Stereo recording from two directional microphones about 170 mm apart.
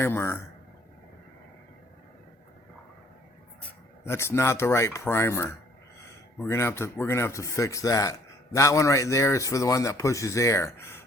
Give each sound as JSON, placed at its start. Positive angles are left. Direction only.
{"t": 0.0, "sound": "a man's voice", "side_deg": 15}
{"t": 4.0, "sound": "a man's voice", "side_deg": 15}